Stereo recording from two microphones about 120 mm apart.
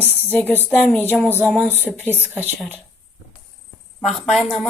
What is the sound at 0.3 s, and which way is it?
Speech, 15° left (ahead or behind).